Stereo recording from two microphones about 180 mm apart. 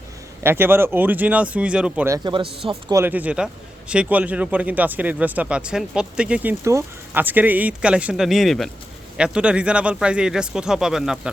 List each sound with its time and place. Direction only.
0.4 s a man's voice: 10° right (ahead or behind)
2.1 s speech: 25° right (ahead or behind)
2.9 s a man's voice: 10° right (ahead or behind)